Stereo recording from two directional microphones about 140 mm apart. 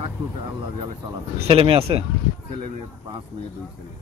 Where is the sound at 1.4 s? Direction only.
45° right (ahead or behind).